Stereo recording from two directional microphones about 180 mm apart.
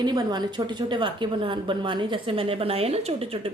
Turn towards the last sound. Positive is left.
turn(degrees=-35)  # may be behind; listen again after turning